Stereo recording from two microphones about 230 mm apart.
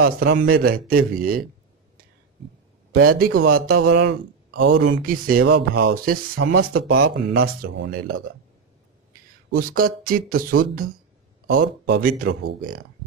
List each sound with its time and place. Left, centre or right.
0.0 s a man's voice: right
2.9 s a man's voice: right
5.0 s a man's voice: right
5.4 s a man's voice: right
9.5 s a man's voice: right